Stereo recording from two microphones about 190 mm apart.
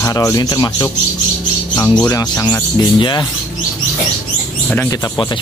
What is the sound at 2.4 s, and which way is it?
Speech, 20° left (ahead or behind).